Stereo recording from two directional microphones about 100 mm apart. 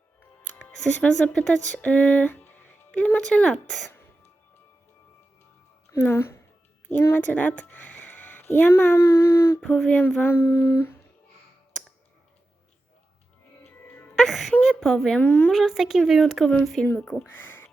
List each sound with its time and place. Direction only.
0.2 s speech: 10° left (ahead or behind)
6.0 s speech: 25° left (ahead or behind)
9.6 s a sound: 10° left (ahead or behind)
10.2 s speech: 25° left (ahead or behind)
13.7 s music: 20° left (ahead or behind)
14.2 s wail: 5° left (ahead or behind)
14.5 s a sound: 5° left (ahead or behind)
15.5 s speech: 5° right (ahead or behind)
17.0 s a sound: 5° left (ahead or behind)
17.2 s speech: 20° left (ahead or behind)